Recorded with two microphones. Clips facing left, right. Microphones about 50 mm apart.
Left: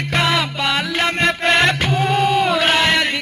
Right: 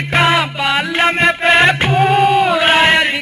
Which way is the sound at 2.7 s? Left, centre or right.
Right.